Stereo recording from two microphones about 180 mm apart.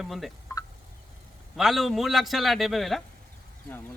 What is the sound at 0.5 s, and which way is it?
Fowl, 20° left (ahead or behind).